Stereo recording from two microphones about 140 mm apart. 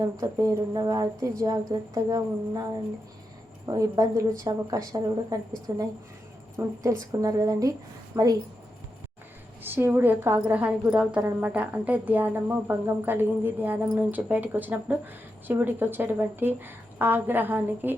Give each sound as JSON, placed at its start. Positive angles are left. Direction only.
{"t": 0.0, "sound": "speech", "side_deg": -25}
{"t": 3.7, "sound": "a woman's voice", "side_deg": -25}
{"t": 9.6, "sound": "a woman's voice", "side_deg": -15}